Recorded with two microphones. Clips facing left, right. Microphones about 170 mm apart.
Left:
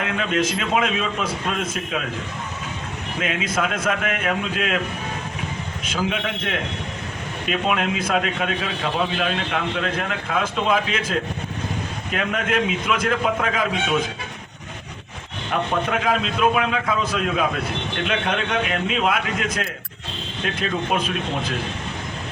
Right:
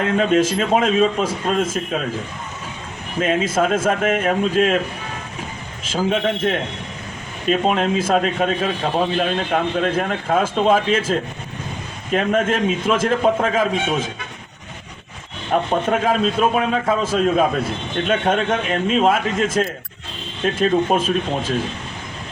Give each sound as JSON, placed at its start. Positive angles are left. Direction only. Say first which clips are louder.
{"t": 0.0, "sound": "a man's voice", "louder": "right 6 dB", "side_deg": -40}
{"t": 3.2, "sound": "a man's voice", "louder": "right 6 dB", "side_deg": -40}
{"t": 6.0, "sound": "a man's voice", "louder": "right 6 dB", "side_deg": -40}
{"t": 15.7, "sound": "a man's voice", "louder": "right 2 dB", "side_deg": -40}